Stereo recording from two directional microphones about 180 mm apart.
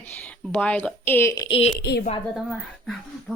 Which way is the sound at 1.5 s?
30° left (ahead or behind).